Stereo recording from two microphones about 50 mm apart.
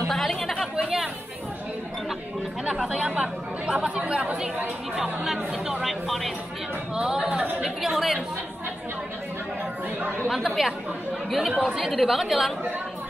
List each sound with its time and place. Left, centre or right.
0.1 s chatter: centre
2.9 s speech: right
4.9 s speech: centre
6.0 s a woman's voice: centre
7.0 s a woman's voice: centre
10.3 s a woman's voice: centre